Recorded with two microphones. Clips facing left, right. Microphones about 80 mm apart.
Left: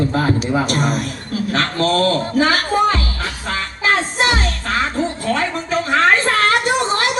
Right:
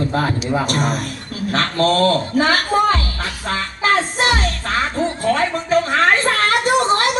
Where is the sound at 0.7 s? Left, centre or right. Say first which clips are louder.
Left 1 dB; right.